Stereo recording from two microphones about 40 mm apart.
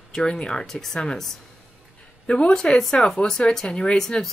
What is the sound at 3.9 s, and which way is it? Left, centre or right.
Speech, centre.